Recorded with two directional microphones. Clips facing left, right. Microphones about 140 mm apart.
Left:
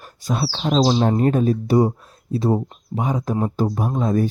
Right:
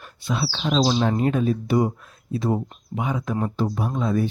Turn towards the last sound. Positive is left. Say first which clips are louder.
# left 3 dB
turn(degrees=40)  # may be behind; listen again after turning